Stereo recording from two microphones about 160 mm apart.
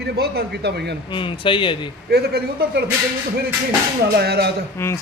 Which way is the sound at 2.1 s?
85° right.